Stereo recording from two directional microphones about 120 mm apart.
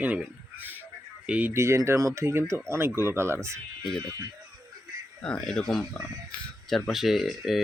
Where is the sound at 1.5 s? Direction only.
25° right (ahead or behind).